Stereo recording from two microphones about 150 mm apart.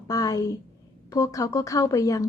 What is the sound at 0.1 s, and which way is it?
Speech, 25° left (ahead or behind).